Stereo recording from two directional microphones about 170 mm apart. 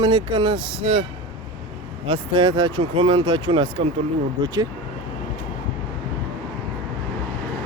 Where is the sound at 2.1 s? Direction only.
25° right (ahead or behind).